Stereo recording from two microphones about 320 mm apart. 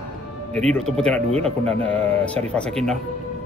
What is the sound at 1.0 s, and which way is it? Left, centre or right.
Speech, centre.